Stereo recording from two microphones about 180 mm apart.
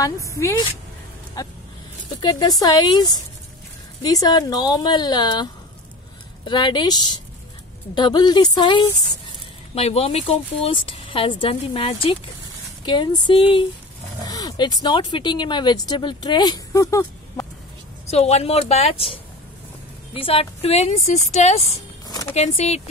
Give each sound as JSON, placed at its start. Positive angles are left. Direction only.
{"t": 0.0, "sound": "a woman's voice", "side_deg": 15}
{"t": 18.1, "sound": "speech", "side_deg": 35}
{"t": 20.2, "sound": "speech", "side_deg": 30}
{"t": 22.0, "sound": "a sound", "side_deg": 20}
{"t": 22.3, "sound": "speech", "side_deg": 35}